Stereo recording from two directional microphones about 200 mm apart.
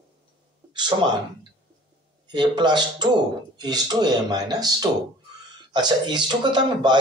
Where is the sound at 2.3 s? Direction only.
20° right (ahead or behind).